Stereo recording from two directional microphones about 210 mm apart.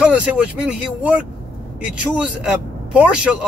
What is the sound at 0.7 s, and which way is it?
Speech, 5° right (ahead or behind).